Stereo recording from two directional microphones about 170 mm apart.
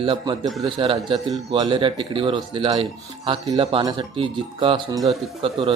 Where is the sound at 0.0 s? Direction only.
30° right (ahead or behind).